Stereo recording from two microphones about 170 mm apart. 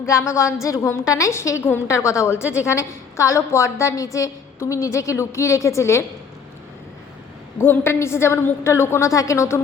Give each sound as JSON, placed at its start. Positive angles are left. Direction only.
{"t": 0.0, "sound": "a woman's voice", "side_deg": 15}
{"t": 7.6, "sound": "a woman's voice", "side_deg": 15}